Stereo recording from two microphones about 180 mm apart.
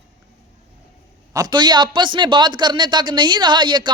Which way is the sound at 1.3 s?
20° right (ahead or behind).